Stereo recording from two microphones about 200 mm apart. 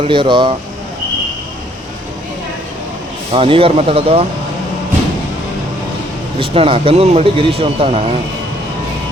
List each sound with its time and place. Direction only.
0.0 s speech: 25° right (ahead or behind)
3.3 s speech: 25° right (ahead or behind)
6.4 s speech: 25° right (ahead or behind)